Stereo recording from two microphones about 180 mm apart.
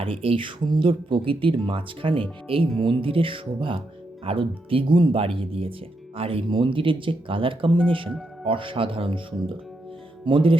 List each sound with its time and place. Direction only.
0.0 s speech: 30° right (ahead or behind)